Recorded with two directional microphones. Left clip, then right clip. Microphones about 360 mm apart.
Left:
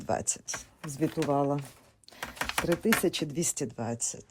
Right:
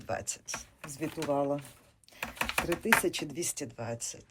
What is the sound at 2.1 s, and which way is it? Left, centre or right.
Typing, left.